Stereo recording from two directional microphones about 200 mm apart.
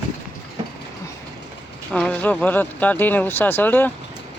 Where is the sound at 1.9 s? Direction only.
5° left (ahead or behind).